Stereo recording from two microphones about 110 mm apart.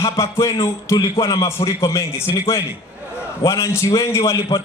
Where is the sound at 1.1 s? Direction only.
50° left (ahead or behind).